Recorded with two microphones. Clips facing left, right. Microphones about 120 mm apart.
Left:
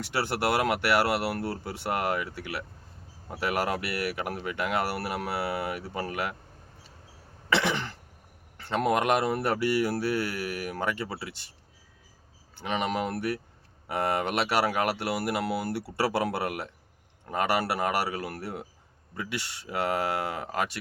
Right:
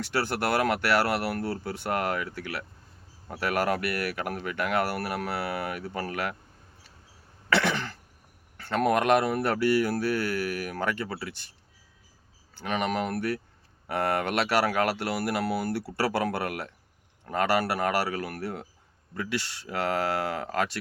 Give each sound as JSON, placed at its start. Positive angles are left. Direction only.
{"t": 0.0, "sound": "speech", "side_deg": 20}
{"t": 7.5, "sound": "throat clearing", "side_deg": 20}
{"t": 8.5, "sound": "speech", "side_deg": 20}
{"t": 12.5, "sound": "speech", "side_deg": 20}